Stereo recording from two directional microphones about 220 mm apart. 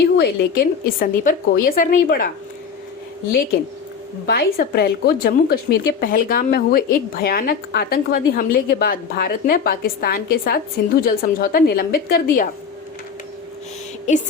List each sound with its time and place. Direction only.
0.0 s a woman's voice: 45° left (ahead or behind)
4.3 s speech: 45° left (ahead or behind)